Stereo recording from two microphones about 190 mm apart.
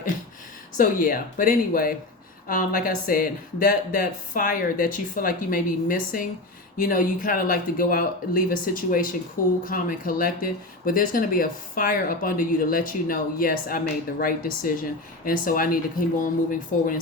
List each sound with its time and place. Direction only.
0.8 s speech: 45° left (ahead or behind)